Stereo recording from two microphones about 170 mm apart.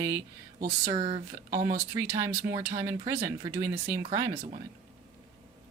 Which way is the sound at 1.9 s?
15° right (ahead or behind).